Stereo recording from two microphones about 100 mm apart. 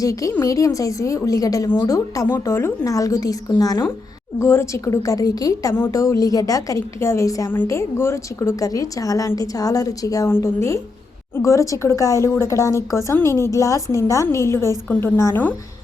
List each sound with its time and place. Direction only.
0.0 s a woman's voice: 35° left (ahead or behind)
4.4 s a woman's voice: 25° left (ahead or behind)
10.2 s a woman's voice: 25° left (ahead or behind)